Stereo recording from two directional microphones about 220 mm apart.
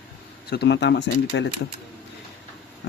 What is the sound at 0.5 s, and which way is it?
Speech, 50° left (ahead or behind).